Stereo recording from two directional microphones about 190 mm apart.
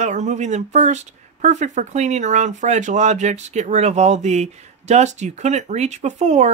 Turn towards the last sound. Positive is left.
turn(degrees=-40)  # may be behind; listen again after turning